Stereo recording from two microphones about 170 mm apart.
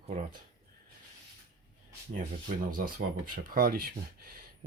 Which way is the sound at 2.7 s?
55° right (ahead or behind).